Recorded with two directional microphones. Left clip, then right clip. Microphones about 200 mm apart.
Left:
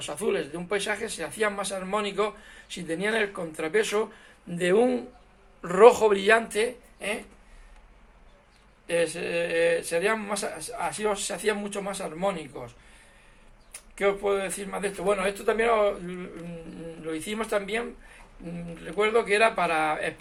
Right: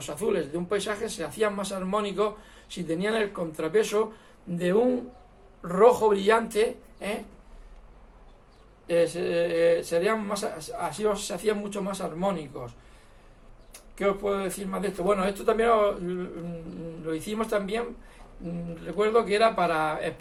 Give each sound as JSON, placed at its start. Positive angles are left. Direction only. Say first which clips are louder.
{"t": 0.0, "sound": "speech", "louder": "even", "side_deg": 20}
{"t": 8.9, "sound": "speech", "louder": "right 2 dB", "side_deg": 20}
{"t": 13.7, "sound": "speech", "louder": "left 1 dB", "side_deg": 20}